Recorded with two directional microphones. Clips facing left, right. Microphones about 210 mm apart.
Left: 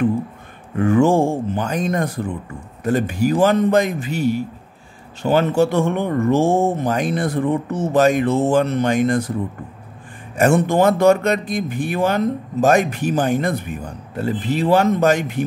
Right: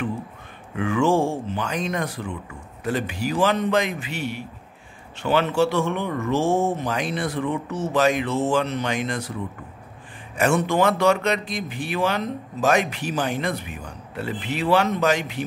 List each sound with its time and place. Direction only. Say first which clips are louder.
0.7 s speech: left 5 dB; 45° left (ahead or behind)
10.3 s speech: left 5 dB; 45° left (ahead or behind)